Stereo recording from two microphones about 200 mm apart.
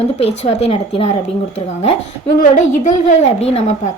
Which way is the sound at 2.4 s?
35° left (ahead or behind).